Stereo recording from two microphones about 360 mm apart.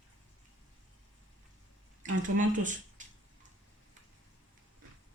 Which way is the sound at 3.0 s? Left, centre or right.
Right.